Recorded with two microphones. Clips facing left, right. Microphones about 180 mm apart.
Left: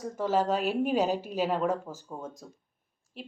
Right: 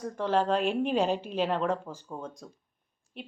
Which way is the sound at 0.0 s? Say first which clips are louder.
Even; 5° left (ahead or behind).